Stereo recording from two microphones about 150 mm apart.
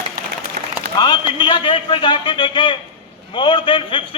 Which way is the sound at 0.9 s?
30° left (ahead or behind).